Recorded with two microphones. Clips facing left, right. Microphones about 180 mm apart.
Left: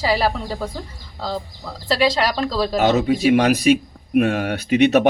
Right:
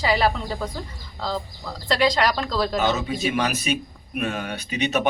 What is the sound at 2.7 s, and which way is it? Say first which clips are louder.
Speech: left 6 dB; 60° left (ahead or behind).